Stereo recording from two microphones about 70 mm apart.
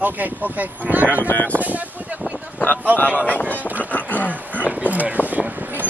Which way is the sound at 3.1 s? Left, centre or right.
Left.